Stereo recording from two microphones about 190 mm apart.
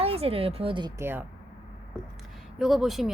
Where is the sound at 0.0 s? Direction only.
30° right (ahead or behind); by 1.2 s 15° right (ahead or behind).